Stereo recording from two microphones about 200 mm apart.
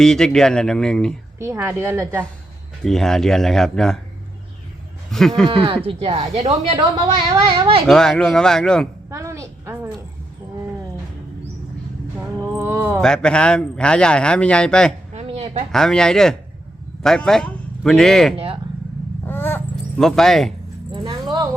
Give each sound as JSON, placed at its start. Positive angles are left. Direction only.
{"t": 0.0, "sound": "speech", "side_deg": 5}
{"t": 1.4, "sound": "a woman's voice", "side_deg": -15}
{"t": 2.8, "sound": "speech", "side_deg": 0}
{"t": 5.1, "sound": "speech", "side_deg": 0}
{"t": 5.5, "sound": "speech", "side_deg": -25}
{"t": 7.9, "sound": "speech", "side_deg": 0}
{"t": 9.0, "sound": "a woman's voice", "side_deg": -15}
{"t": 12.4, "sound": "speech", "side_deg": -15}
{"t": 13.0, "sound": "speech", "side_deg": 5}
{"t": 15.1, "sound": "a sound", "side_deg": -30}
{"t": 15.7, "sound": "a man's voice", "side_deg": 5}
{"t": 18.3, "sound": "speech", "side_deg": -25}
{"t": 19.2, "sound": "a sound", "side_deg": 10}
{"t": 20.9, "sound": "keys jangling", "side_deg": -25}